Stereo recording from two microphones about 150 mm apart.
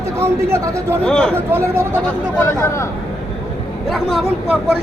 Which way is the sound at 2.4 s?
15° left (ahead or behind).